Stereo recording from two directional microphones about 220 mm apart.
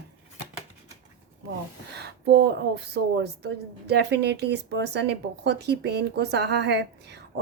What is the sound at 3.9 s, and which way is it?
Speech, 50° right (ahead or behind).